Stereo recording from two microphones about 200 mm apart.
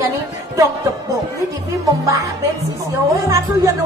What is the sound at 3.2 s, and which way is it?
Music, 15° right (ahead or behind).